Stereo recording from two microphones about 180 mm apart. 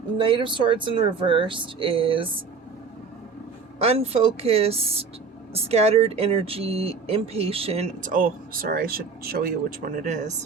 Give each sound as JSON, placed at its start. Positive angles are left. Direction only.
{"t": 0.2, "sound": "speech", "side_deg": -30}
{"t": 3.8, "sound": "speech", "side_deg": -35}